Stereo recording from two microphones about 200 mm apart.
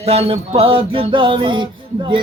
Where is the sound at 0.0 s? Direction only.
30° right (ahead or behind).